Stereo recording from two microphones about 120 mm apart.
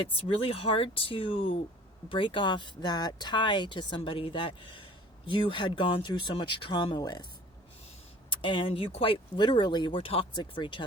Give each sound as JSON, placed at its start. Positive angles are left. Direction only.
{"t": 0.1, "sound": "speech", "side_deg": 50}
{"t": 8.3, "sound": "speech", "side_deg": 45}
{"t": 10.0, "sound": "speech", "side_deg": 55}
{"t": 10.3, "sound": "speech", "side_deg": 40}